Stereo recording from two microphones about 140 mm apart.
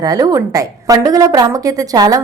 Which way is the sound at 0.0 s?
25° right (ahead or behind).